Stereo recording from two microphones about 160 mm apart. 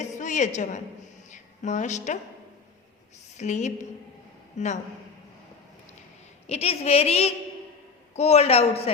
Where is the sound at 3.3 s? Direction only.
45° left (ahead or behind).